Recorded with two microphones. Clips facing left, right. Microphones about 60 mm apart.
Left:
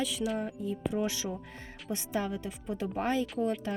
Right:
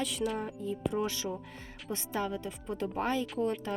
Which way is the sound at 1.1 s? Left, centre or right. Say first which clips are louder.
Even; centre.